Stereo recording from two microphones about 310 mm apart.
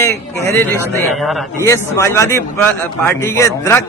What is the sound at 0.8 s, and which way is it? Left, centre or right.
A man's voice, centre.